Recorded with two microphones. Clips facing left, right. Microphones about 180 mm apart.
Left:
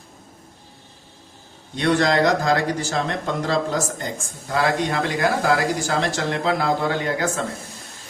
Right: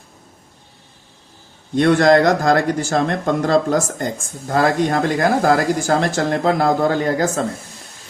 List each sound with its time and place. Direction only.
1.7 s speech: 50° right (ahead or behind)